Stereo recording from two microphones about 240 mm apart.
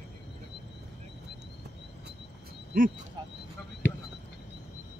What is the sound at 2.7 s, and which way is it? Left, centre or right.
Speech, right.